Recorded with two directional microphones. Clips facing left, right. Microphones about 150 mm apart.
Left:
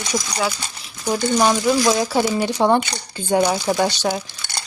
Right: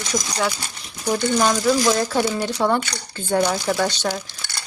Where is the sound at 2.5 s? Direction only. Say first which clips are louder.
Left 3 dB; 20° left (ahead or behind).